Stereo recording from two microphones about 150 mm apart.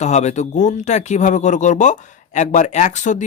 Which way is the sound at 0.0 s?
50° left (ahead or behind).